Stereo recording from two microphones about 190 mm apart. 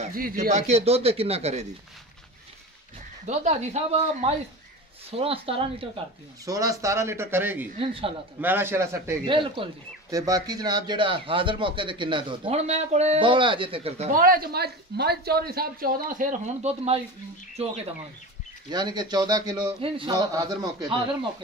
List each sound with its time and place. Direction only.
0.0 s speech: 45° right (ahead or behind)
3.3 s speech: 35° right (ahead or behind)
6.4 s a man's voice: 15° right (ahead or behind)
7.8 s speech: 30° right (ahead or behind)
8.4 s a man's voice: 10° right (ahead or behind)
9.2 s speech: 25° right (ahead or behind)
14.1 s speech: 50° right (ahead or behind); by 17.7 s 30° right (ahead or behind)
18.7 s speech: 20° right (ahead or behind)